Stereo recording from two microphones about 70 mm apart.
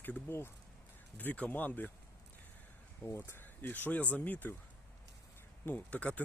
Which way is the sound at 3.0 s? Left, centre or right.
Left.